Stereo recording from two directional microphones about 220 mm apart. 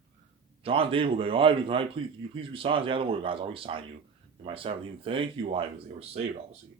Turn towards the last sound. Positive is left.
turn(degrees=-25)  # may be behind; listen again after turning